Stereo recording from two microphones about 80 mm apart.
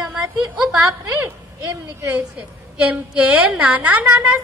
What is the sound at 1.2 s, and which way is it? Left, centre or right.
Speech, right.